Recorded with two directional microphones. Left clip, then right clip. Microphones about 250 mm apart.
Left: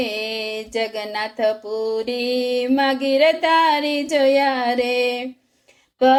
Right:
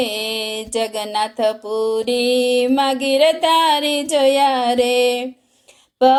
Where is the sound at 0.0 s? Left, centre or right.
Right.